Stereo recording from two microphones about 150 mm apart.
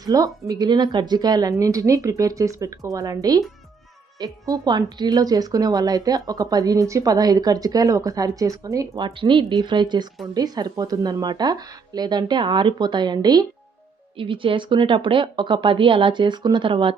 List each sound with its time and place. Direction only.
0.0 s a woman's voice: 25° right (ahead or behind)
9.0 s a woman's voice: 35° right (ahead or behind)